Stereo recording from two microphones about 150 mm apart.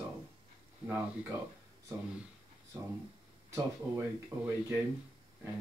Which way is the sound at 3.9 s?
10° right (ahead or behind).